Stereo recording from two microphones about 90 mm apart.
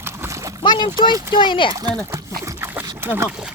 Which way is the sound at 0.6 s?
60° left (ahead or behind).